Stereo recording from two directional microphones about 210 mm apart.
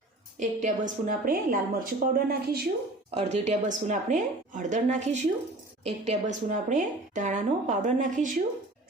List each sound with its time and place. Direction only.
0.3 s a woman's voice: 35° right (ahead or behind)
3.2 s a woman's voice: 30° right (ahead or behind)